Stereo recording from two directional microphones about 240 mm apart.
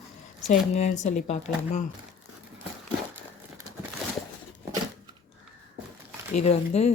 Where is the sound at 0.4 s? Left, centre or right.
Left.